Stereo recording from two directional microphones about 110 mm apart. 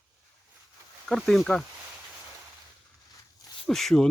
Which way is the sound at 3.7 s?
5° left (ahead or behind).